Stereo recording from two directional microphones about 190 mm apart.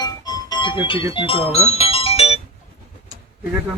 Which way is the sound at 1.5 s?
35° left (ahead or behind).